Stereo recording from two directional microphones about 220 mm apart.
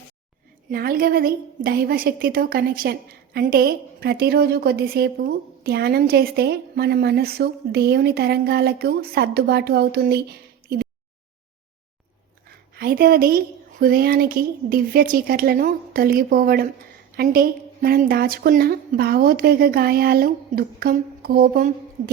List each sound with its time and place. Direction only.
0.7 s a woman's voice: 40° right (ahead or behind)
12.7 s a woman's voice: 45° right (ahead or behind)